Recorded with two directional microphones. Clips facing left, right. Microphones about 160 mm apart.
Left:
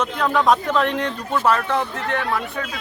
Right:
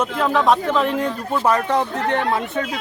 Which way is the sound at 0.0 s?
5° right (ahead or behind).